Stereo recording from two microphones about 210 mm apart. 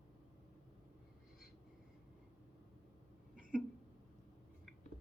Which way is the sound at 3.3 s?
40° right (ahead or behind).